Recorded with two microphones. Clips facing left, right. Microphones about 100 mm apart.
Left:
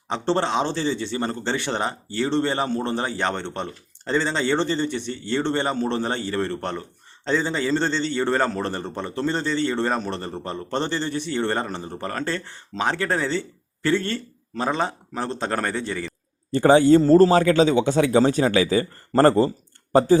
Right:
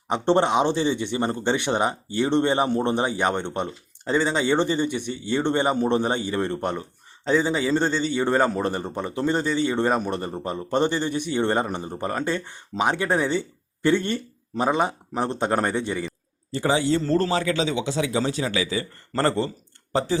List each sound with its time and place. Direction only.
0.1 s speech: 15° right (ahead or behind)
16.5 s speech: 50° left (ahead or behind)
17.0 s speech: 35° left (ahead or behind)